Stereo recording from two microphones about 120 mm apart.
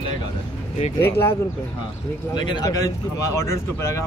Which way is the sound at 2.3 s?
40° left (ahead or behind).